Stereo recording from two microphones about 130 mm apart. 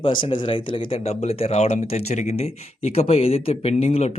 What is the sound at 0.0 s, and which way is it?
Speech, 45° left (ahead or behind).